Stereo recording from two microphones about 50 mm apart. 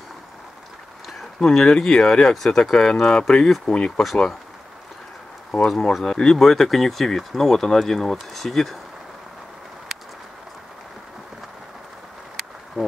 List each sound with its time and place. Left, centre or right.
1.4 s speech: centre
4.0 s speech: centre
5.7 s speech: centre